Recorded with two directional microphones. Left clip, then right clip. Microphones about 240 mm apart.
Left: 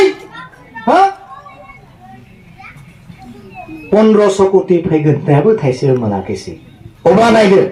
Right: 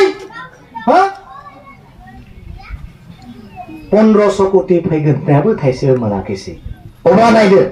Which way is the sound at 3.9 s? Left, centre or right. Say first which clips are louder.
Left 1 dB; left.